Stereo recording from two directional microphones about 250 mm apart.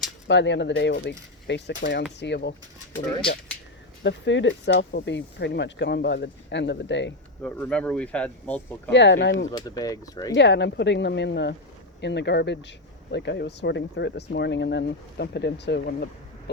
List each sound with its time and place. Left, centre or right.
0.3 s speech: left
4.0 s speech: left
7.4 s speech: centre
8.9 s speech: left
9.5 s speech: centre
10.3 s speech: left